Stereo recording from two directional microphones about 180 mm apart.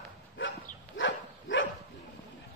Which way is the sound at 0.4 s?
90° left.